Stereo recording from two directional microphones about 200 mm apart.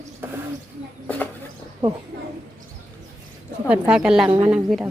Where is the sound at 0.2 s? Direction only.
10° right (ahead or behind).